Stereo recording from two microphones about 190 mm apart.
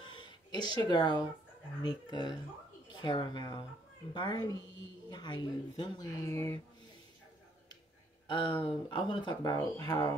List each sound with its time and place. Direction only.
0.0 s a sound: 25° left (ahead or behind)
1.8 s a woman's voice: 25° left (ahead or behind)
8.3 s speech: 25° left (ahead or behind)